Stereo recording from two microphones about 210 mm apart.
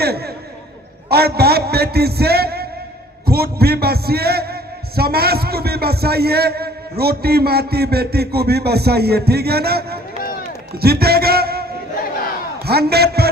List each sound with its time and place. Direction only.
0.0 s a sound: 50° right (ahead or behind)
1.1 s a man's voice: 50° right (ahead or behind)
12.6 s a man's voice: 50° right (ahead or behind)